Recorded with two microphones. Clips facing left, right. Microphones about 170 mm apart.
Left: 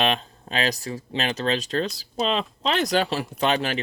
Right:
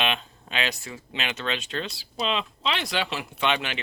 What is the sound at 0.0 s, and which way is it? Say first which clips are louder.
Speech: left 4 dB; 40° left (ahead or behind).